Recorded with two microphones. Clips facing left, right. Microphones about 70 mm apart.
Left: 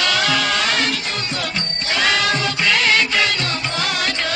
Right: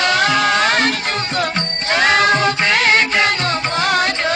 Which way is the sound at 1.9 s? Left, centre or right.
Right.